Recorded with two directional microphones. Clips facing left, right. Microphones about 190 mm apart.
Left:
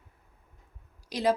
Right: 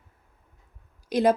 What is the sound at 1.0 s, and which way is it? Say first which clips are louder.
Speech: right 6 dB; 55° right (ahead or behind).